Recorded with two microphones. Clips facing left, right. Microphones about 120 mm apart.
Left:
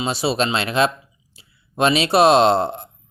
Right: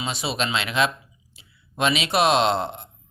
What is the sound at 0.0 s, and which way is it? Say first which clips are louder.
Speech: left 6 dB; 35° left (ahead or behind).